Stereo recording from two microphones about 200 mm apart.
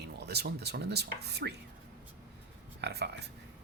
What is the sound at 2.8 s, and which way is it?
Speech, 55° right (ahead or behind).